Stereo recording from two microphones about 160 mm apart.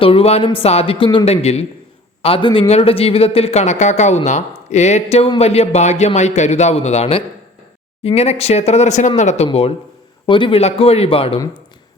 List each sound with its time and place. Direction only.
0.0 s a man's voice: 35° left (ahead or behind)